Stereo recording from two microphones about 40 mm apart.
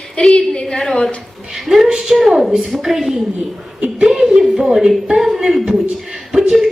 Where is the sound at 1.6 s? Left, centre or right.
Centre.